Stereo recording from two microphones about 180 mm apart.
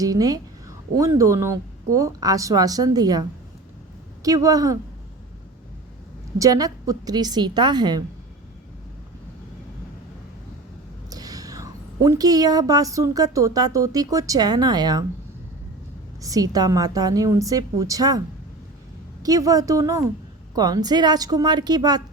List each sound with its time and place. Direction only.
0.0 s a woman's voice: 20° right (ahead or behind)
6.4 s a woman's voice: 20° right (ahead or behind)
11.1 s a woman's voice: 20° right (ahead or behind)
16.2 s a woman's voice: 20° right (ahead or behind)
19.2 s a woman's voice: 20° right (ahead or behind)